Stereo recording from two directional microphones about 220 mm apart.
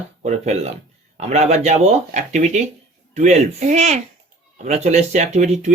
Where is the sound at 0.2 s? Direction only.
30° right (ahead or behind).